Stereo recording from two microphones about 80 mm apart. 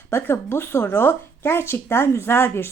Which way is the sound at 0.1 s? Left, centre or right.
Left.